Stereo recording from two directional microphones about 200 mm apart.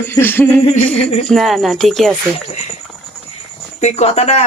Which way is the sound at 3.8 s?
30° left (ahead or behind).